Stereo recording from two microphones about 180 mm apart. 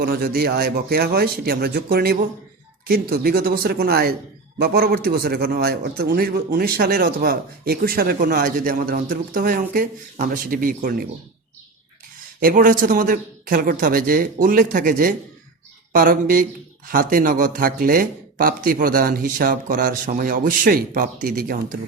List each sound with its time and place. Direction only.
0.0 s a man's voice: 55° right (ahead or behind)
12.4 s speech: 50° right (ahead or behind)